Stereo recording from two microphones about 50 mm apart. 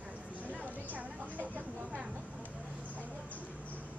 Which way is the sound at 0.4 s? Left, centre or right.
Right.